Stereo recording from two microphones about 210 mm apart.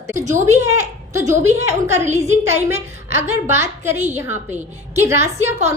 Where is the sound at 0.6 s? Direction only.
15° right (ahead or behind).